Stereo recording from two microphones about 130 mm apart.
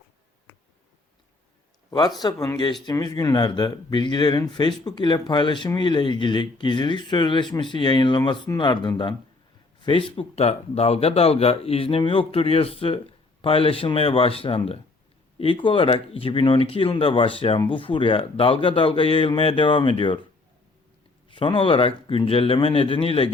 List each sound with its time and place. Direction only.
1.9 s speech: 30° left (ahead or behind)
21.2 s speech: 40° left (ahead or behind)